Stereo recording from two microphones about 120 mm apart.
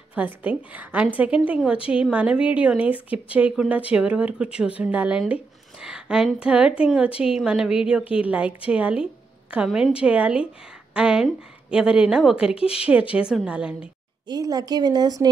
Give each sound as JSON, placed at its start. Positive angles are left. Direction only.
{"t": 0.1, "sound": "a woman's voice", "side_deg": -15}
{"t": 14.2, "sound": "a woman's voice", "side_deg": -35}